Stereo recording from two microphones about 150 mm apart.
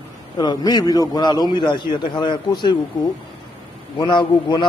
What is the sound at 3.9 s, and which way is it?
Speech, 30° left (ahead or behind).